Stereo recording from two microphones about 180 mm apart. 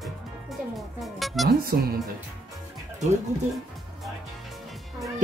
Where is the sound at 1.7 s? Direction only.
55° right (ahead or behind).